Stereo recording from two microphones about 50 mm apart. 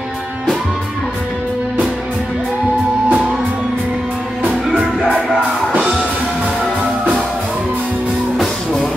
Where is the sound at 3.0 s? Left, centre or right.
Right.